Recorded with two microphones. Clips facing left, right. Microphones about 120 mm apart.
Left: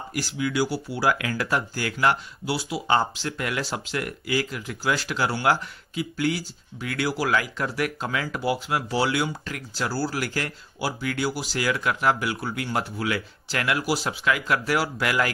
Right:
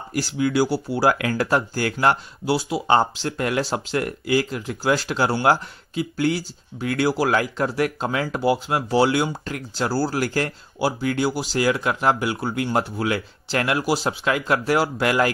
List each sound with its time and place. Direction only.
0.1 s speech: 30° right (ahead or behind)